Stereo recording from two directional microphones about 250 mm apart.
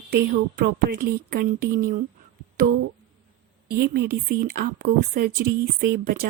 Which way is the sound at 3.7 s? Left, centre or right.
Right.